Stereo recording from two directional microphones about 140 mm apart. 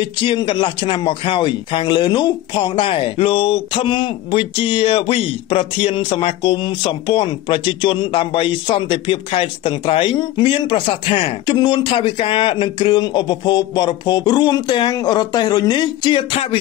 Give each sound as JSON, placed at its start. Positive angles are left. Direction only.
{"t": 0.0, "sound": "speech", "side_deg": 35}